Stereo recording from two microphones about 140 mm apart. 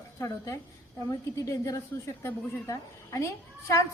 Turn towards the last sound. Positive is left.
turn(degrees=20)  # may be behind; listen again after turning